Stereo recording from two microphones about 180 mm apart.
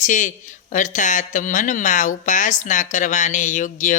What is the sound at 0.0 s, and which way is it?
Speech, 45° left (ahead or behind).